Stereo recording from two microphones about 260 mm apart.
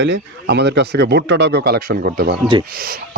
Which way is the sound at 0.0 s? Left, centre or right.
Right.